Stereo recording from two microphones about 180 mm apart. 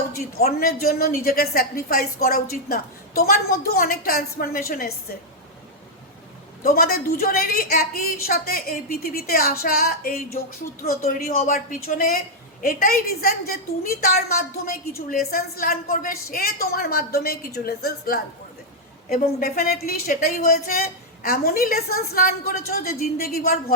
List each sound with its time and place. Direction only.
0.3 s a woman's voice: 60° left (ahead or behind)
6.6 s a woman's voice: 55° left (ahead or behind)